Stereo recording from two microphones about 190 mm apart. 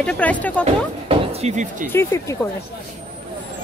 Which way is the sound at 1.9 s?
15° left (ahead or behind).